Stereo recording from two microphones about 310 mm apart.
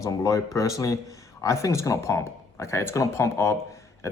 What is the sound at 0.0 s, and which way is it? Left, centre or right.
Speech, centre.